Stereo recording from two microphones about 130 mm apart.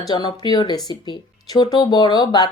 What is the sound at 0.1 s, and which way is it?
Speech, 35° left (ahead or behind).